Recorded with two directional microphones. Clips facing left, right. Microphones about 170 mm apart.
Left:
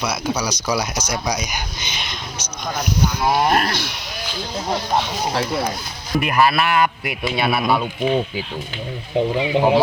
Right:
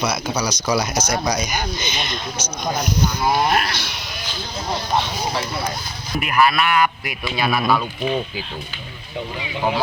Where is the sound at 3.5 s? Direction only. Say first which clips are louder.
Left 2 dB; 45° left (ahead or behind).